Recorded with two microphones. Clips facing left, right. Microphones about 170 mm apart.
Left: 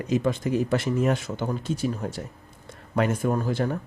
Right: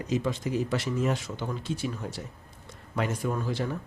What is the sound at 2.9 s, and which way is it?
Speech, 55° left (ahead or behind).